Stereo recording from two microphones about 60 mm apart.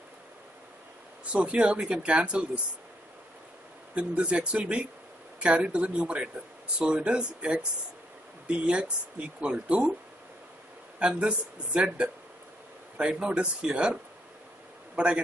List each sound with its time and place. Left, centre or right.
1.3 s speech: centre
3.9 s speech: centre
11.0 s speech: centre
15.0 s speech: centre